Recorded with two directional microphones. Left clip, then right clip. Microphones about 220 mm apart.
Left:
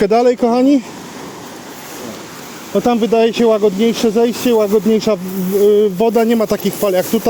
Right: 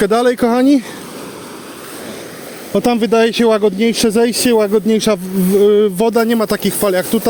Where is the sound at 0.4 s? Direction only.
25° right (ahead or behind).